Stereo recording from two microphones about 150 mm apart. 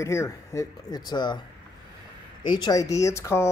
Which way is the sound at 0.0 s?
20° left (ahead or behind).